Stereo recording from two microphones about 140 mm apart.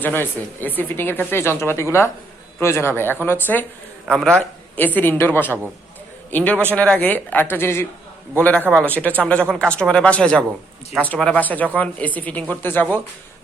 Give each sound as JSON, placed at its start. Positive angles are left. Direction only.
{"t": 0.0, "sound": "speech", "side_deg": 15}
{"t": 4.0, "sound": "a man's voice", "side_deg": 0}
{"t": 4.8, "sound": "speech", "side_deg": 10}